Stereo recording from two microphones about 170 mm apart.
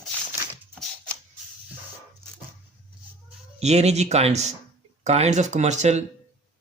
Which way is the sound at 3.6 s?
40° right (ahead or behind).